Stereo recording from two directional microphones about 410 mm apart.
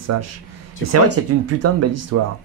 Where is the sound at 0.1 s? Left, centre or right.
Right.